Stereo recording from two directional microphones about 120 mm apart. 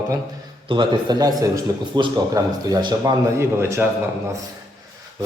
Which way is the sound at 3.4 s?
25° right (ahead or behind).